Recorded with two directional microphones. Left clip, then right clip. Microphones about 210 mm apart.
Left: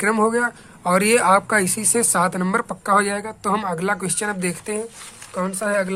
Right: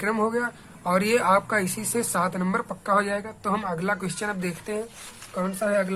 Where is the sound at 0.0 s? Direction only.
30° left (ahead or behind).